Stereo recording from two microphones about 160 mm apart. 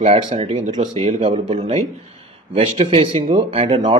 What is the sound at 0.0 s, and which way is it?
Speech, 45° right (ahead or behind).